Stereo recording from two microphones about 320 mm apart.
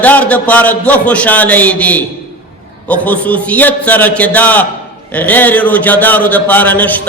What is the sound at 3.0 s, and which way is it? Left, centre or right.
A man's voice, centre.